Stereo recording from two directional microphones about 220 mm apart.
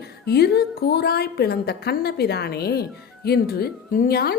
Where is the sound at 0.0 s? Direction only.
45° left (ahead or behind).